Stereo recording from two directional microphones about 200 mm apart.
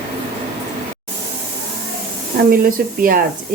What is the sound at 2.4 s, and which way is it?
Speech, 45° right (ahead or behind).